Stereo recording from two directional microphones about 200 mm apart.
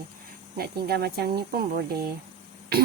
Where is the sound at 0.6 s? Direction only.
50° right (ahead or behind).